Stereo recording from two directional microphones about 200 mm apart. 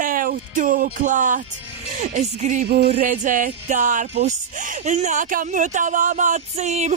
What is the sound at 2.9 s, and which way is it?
Speech, 35° right (ahead or behind).